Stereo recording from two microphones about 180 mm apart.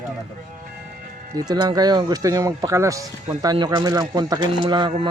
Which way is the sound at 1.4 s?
20° right (ahead or behind).